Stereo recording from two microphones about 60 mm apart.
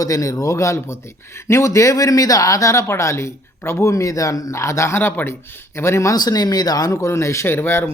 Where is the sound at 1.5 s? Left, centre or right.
Left.